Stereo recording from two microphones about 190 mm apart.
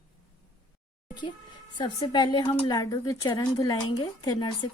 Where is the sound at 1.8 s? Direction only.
25° left (ahead or behind).